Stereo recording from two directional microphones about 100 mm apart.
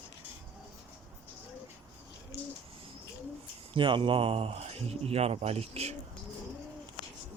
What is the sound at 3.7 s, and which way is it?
Speech, 55° right (ahead or behind).